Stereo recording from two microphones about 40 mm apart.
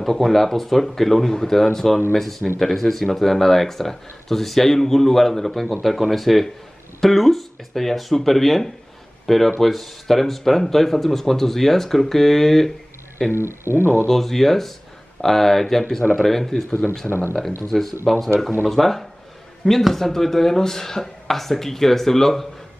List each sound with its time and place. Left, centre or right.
0.0 s speech: centre
13.4 s speech: right
14.0 s speech: centre